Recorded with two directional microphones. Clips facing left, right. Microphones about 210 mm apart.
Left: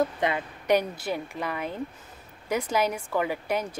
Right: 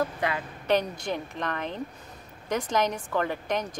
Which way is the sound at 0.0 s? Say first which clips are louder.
Left 3 dB; 20° left (ahead or behind).